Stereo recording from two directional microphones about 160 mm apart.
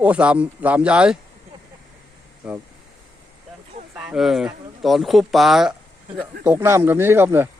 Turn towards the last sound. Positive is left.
turn(degrees=-15)  # may be behind; listen again after turning